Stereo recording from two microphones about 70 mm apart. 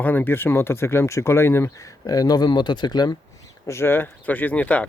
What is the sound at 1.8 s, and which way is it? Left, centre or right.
Speech, left.